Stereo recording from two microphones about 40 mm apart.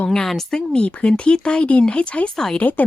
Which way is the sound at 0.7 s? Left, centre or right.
Left.